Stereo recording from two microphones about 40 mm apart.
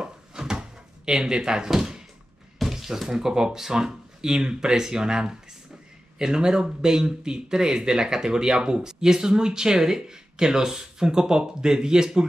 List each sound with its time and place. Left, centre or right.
0.0 s drawer open or close: centre
2.6 s speech: centre